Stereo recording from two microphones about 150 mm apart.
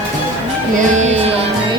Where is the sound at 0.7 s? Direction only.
55° right (ahead or behind).